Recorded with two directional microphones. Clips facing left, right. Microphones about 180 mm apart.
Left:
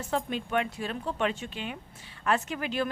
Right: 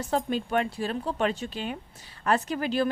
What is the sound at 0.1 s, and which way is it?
A woman's voice, 40° right (ahead or behind).